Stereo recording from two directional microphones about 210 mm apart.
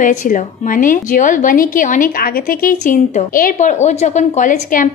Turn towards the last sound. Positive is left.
turn(degrees=40)  # may be behind; listen again after turning